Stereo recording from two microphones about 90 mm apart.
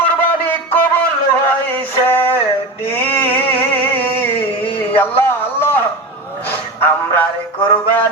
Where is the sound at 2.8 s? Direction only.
20° left (ahead or behind).